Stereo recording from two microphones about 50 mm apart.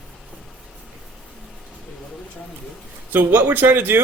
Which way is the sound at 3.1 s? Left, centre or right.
Right.